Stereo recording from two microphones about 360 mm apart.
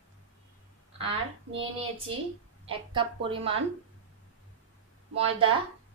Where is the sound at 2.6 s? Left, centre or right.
Centre.